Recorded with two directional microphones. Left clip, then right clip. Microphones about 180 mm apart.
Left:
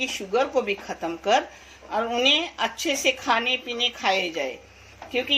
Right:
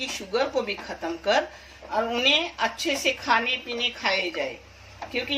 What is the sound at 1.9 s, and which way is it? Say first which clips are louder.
A woman's voice: left 1 dB; 50° left (ahead or behind).